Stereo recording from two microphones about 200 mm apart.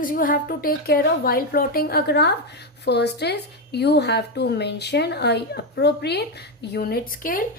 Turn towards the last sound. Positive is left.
turn(degrees=45)  # may be behind; listen again after turning